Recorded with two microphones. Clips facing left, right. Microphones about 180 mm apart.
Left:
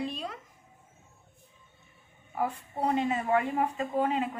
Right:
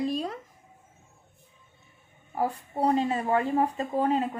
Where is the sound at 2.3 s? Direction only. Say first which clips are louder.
Right 3 dB; 35° right (ahead or behind).